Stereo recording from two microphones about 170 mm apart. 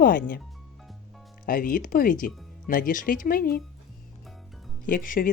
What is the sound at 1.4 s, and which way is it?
Speech, 55° left (ahead or behind).